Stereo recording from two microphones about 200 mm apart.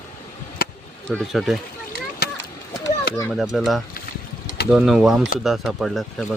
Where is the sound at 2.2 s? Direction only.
50° left (ahead or behind).